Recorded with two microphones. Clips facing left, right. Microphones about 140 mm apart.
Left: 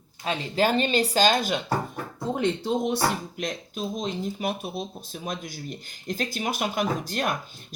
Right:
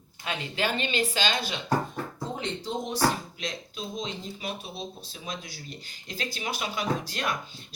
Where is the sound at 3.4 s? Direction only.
50° left (ahead or behind).